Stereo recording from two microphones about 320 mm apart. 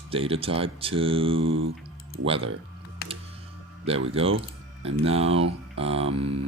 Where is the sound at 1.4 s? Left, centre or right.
Right.